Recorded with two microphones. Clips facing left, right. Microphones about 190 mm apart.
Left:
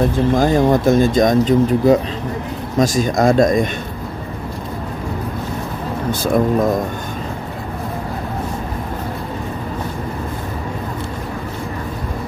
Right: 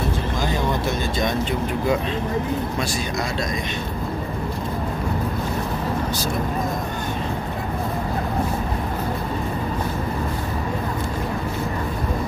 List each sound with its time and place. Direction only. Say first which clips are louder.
0.3 s speech: left 12 dB; 50° left (ahead or behind)